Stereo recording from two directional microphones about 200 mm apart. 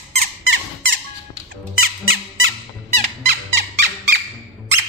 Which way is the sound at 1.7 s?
90° right.